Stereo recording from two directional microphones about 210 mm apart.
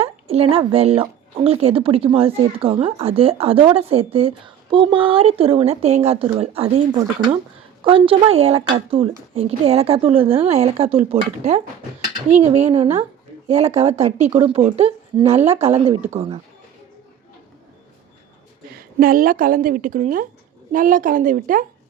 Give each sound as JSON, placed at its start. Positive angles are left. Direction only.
{"t": 0.0, "sound": "a sound", "side_deg": -30}
{"t": 0.5, "sound": "speech", "side_deg": -25}
{"t": 7.9, "sound": "a woman's voice", "side_deg": -25}
{"t": 18.9, "sound": "a woman's voice", "side_deg": -40}